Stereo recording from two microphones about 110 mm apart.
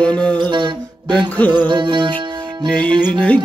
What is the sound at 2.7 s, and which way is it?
Mantra, 10° left (ahead or behind).